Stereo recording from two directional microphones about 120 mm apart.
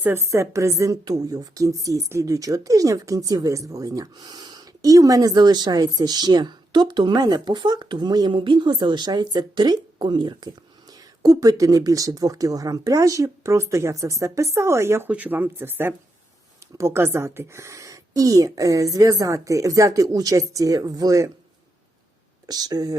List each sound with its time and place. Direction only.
0.0 s a woman's voice: 20° right (ahead or behind)
22.4 s speech: 35° right (ahead or behind)